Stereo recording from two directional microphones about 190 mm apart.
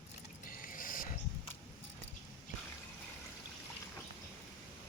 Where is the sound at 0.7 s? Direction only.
45° left (ahead or behind).